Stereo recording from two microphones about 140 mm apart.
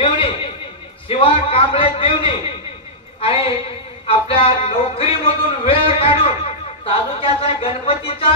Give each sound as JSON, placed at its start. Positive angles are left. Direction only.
{"t": 0.0, "sound": "a sound", "side_deg": 40}
{"t": 1.0, "sound": "music", "side_deg": 40}
{"t": 3.2, "sound": "a woman's voice", "side_deg": 45}
{"t": 4.1, "sound": "music", "side_deg": 40}